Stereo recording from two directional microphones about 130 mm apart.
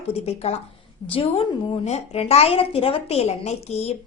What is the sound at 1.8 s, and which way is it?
A woman's voice, 55° left (ahead or behind).